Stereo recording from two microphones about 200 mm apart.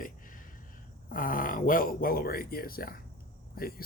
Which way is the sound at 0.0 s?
40° left (ahead or behind).